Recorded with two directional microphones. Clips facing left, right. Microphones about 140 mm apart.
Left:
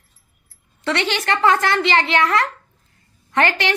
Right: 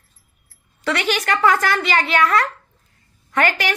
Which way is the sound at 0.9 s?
25° left (ahead or behind).